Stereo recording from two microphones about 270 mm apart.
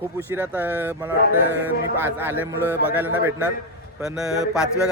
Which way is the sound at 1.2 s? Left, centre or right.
Left.